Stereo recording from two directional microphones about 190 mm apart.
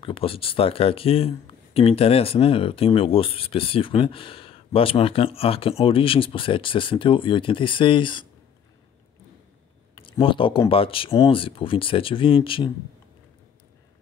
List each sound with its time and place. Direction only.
0.0 s speech: 30° left (ahead or behind)
10.0 s speech: 25° left (ahead or behind)